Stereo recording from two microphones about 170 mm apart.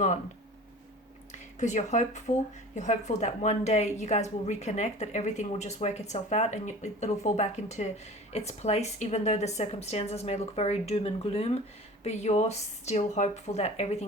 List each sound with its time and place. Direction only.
1.3 s a woman's voice: 45° left (ahead or behind)